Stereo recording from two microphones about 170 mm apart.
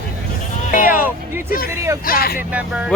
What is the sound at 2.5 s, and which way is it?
Speech, 5° right (ahead or behind).